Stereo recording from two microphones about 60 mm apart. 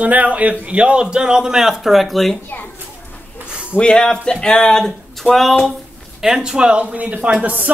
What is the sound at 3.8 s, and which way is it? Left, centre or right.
Speech, centre.